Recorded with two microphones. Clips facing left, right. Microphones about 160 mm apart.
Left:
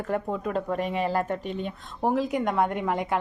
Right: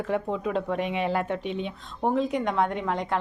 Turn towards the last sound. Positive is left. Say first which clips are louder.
# left 1 dB
turn(degrees=5)  # may be behind; listen again after turning